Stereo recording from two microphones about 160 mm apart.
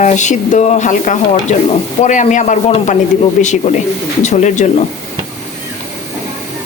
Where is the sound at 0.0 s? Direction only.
50° left (ahead or behind).